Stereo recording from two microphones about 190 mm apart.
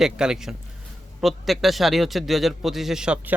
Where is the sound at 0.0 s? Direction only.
5° right (ahead or behind).